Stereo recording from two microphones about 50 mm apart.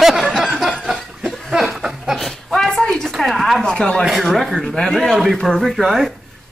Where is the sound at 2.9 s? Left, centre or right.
Centre.